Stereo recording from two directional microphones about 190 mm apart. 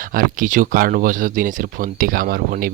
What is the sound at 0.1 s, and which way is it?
Speech, 45° right (ahead or behind).